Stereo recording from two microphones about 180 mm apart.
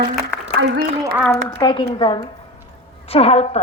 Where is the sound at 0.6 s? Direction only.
70° right (ahead or behind).